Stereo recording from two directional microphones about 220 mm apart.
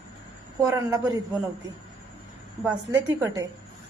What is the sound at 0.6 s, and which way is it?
Speech, 15° right (ahead or behind).